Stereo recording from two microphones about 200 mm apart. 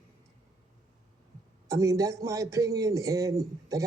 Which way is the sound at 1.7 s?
15° right (ahead or behind).